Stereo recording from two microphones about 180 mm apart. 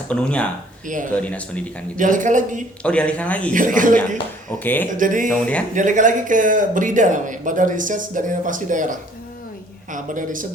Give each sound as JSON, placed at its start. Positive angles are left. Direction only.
{"t": 0.1, "sound": "speech", "side_deg": 5}
{"t": 0.9, "sound": "speech", "side_deg": -45}
{"t": 1.1, "sound": "speech", "side_deg": 5}
{"t": 2.0, "sound": "speech", "side_deg": -45}
{"t": 2.8, "sound": "speech", "side_deg": 5}
{"t": 3.5, "sound": "speech", "side_deg": -45}
{"t": 4.4, "sound": "speech", "side_deg": 10}
{"t": 4.9, "sound": "speech", "side_deg": -45}
{"t": 5.3, "sound": "speech", "side_deg": 5}
{"t": 5.7, "sound": "speech", "side_deg": -45}